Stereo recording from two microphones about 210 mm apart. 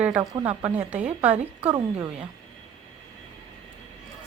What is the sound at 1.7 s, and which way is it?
Speech, 20° right (ahead or behind).